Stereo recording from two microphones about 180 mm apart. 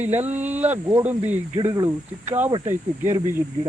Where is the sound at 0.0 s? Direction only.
10° right (ahead or behind).